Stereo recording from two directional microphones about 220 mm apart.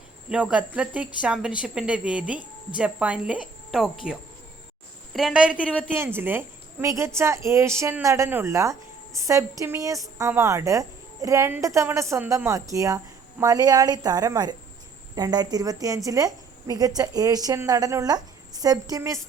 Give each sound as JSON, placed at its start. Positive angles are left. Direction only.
{"t": 0.3, "sound": "a woman's voice", "side_deg": -5}